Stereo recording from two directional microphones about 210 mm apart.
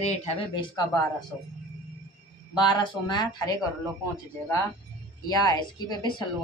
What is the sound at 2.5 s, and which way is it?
Speech, 20° left (ahead or behind).